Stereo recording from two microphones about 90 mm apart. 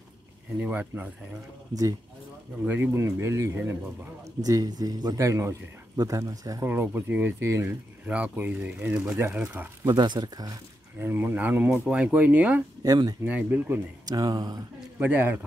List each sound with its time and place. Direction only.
0.6 s a man's voice: 20° right (ahead or behind)
2.6 s a man's voice: 20° right (ahead or behind)
4.5 s a man's voice: 45° right (ahead or behind)
6.6 s a man's voice: 25° right (ahead or behind)
7.6 s speech: 15° right (ahead or behind)
9.8 s speech: 55° right (ahead or behind)
11.0 s a man's voice: 25° right (ahead or behind)
12.8 s speech: 45° right (ahead or behind)
13.2 s speech: 15° right (ahead or behind)
14.0 s speech: 45° right (ahead or behind)
15.0 s a man's voice: 20° right (ahead or behind)